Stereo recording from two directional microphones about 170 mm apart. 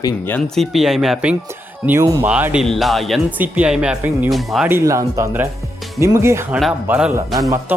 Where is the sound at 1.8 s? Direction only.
15° right (ahead or behind); by 4.6 s centre (ahead or behind).